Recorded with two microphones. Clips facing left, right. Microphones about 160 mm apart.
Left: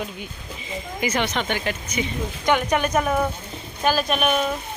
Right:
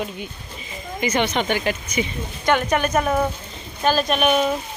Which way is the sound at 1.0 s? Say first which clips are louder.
Right 3 dB; 5° left (ahead or behind).